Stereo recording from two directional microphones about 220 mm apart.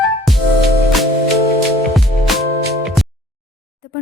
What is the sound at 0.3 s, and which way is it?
Music, centre (ahead or behind).